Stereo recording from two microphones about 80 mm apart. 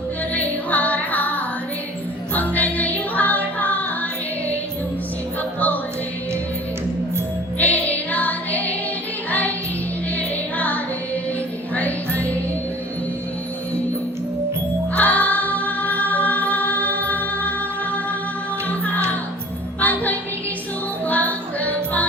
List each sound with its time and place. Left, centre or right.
0.3 s music: centre
5.5 s music: left
7.6 s music: centre
10.2 s music: centre
14.9 s music: left
18.7 s music: left